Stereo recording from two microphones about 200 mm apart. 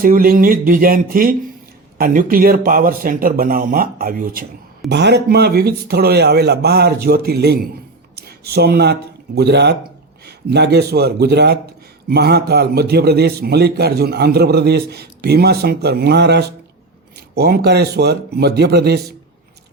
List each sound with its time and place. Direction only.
0.0 s a man's voice: 45° right (ahead or behind)
4.9 s a man's voice: 55° right (ahead or behind)